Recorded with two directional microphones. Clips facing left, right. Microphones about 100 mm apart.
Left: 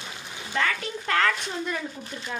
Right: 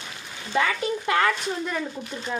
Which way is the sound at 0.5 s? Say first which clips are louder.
Right 4 dB; 15° right (ahead or behind).